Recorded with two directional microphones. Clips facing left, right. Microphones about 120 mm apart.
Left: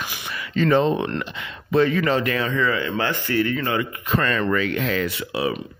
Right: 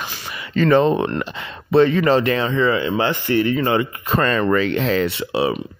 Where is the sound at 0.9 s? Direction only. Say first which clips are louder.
Right 4 dB; 40° right (ahead or behind).